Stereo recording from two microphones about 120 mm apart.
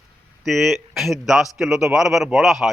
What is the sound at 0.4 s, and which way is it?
A man's voice, centre (ahead or behind).